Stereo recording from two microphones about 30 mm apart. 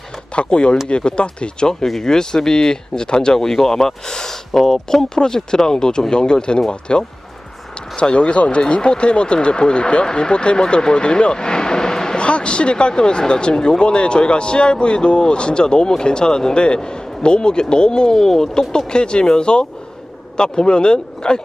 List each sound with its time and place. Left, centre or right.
0.3 s speech: left
2.0 s speech: left
12.1 s speech: left; by 18.4 s centre
18.9 s speech: left